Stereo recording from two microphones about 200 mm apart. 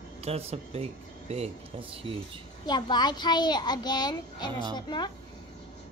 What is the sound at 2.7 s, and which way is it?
A child's voice, 20° left (ahead or behind).